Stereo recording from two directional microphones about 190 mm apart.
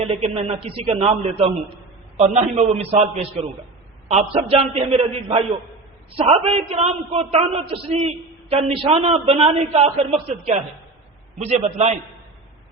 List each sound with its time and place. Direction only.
0.0 s a man's voice: 35° right (ahead or behind)
4.1 s a man's voice: 35° right (ahead or behind)